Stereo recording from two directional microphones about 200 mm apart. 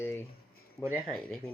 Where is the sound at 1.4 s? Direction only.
30° left (ahead or behind).